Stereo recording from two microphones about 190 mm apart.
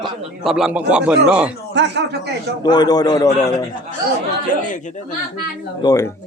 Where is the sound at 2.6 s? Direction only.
20° left (ahead or behind).